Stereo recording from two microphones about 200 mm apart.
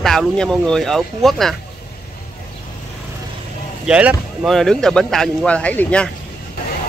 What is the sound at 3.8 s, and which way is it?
Speech, 5° right (ahead or behind).